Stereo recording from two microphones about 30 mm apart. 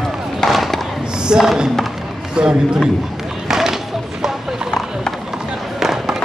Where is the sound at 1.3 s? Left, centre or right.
Right.